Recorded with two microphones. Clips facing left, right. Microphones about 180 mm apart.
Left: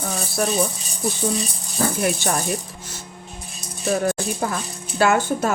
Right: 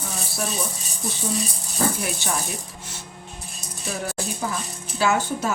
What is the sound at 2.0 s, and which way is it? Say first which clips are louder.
Speech: left 7 dB; 55° left (ahead or behind).